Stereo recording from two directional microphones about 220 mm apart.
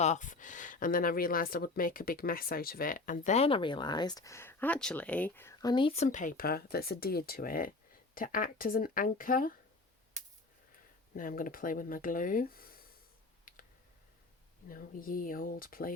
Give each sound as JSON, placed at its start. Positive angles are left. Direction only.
{"t": 0.0, "sound": "speech", "side_deg": 35}
{"t": 11.1, "sound": "speech", "side_deg": 40}
{"t": 14.7, "sound": "speech", "side_deg": 40}